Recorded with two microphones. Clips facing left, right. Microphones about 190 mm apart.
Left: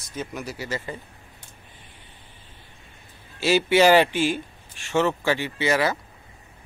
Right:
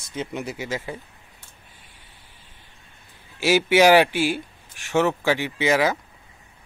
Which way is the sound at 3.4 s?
15° right (ahead or behind).